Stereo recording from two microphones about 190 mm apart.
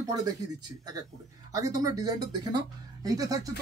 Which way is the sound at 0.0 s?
20° right (ahead or behind).